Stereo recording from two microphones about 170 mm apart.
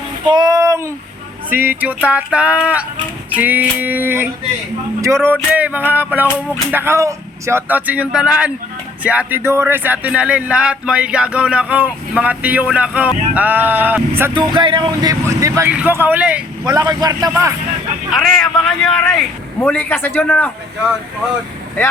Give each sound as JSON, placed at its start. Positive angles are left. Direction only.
{"t": 0.3, "sound": "a sound", "side_deg": -20}
{"t": 1.5, "sound": "speech", "side_deg": -10}
{"t": 14.3, "sound": "speech", "side_deg": -30}
{"t": 16.6, "sound": "speech", "side_deg": -20}
{"t": 18.1, "sound": "a man's voice", "side_deg": 0}